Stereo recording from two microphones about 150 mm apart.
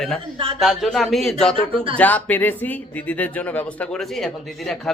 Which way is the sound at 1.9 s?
10° left (ahead or behind).